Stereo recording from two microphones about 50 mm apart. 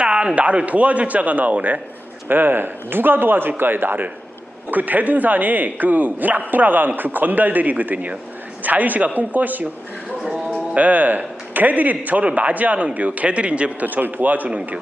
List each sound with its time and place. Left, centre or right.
0.0 s a man's voice: centre; by 9.6 s right
10.8 s speech: right
13.8 s speech: right